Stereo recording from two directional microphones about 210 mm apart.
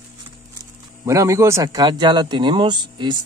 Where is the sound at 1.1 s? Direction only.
15° right (ahead or behind).